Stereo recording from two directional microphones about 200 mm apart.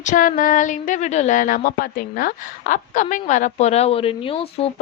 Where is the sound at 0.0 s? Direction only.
40° left (ahead or behind).